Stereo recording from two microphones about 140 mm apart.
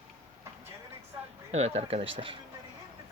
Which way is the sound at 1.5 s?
50° right (ahead or behind).